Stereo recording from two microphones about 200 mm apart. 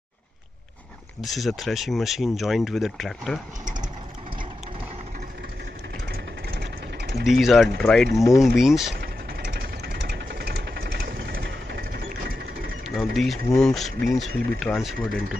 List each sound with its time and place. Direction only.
1.2 s speech: centre (ahead or behind)
6.5 s vehicle: 55° right (ahead or behind)
7.2 s speech: centre (ahead or behind)
9.0 s vehicle: 50° right (ahead or behind)
12.8 s speech: centre (ahead or behind)